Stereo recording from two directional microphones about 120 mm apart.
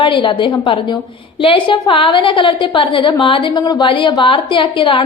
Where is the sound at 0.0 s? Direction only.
45° left (ahead or behind).